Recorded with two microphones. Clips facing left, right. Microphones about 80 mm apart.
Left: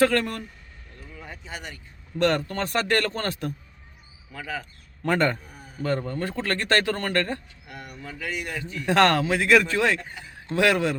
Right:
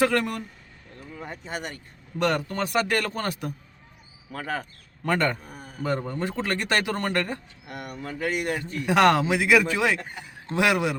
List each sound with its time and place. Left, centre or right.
0.0 s speech: centre
1.1 s speech: right
2.1 s speech: centre
4.3 s speech: right
5.0 s a man's voice: centre
5.8 s speech: centre
7.7 s speech: right
8.8 s speech: centre
10.0 s speech: right
10.5 s speech: centre